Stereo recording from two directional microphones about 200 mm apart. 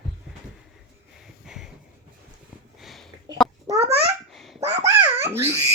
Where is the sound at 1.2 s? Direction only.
Centre (ahead or behind).